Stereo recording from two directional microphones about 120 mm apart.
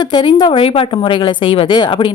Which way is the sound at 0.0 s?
40° left (ahead or behind).